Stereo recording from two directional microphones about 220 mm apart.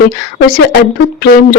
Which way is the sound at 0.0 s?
40° left (ahead or behind).